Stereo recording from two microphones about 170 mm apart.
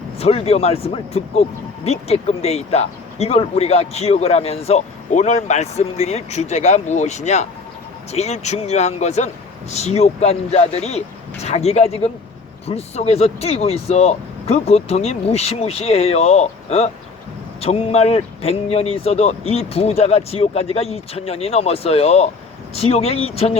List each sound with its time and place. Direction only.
0.2 s speech: 35° left (ahead or behind)